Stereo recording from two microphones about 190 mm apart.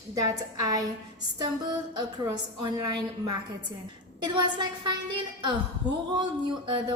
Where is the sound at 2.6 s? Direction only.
20° right (ahead or behind).